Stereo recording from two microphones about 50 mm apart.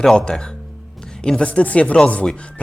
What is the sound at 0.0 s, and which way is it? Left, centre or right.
Speech, centre.